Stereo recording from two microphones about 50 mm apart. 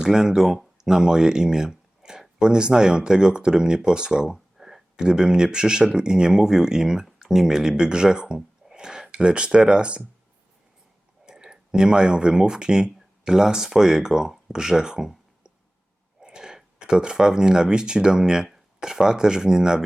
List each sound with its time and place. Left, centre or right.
0.0 s speech: centre
11.3 s speech: centre